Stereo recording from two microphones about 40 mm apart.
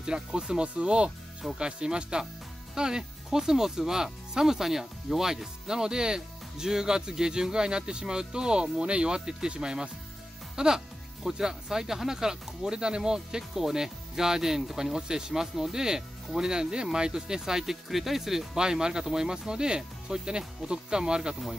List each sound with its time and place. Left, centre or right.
0.0 s speech: centre